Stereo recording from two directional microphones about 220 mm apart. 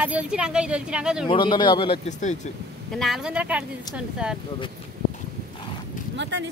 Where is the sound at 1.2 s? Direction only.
20° left (ahead or behind).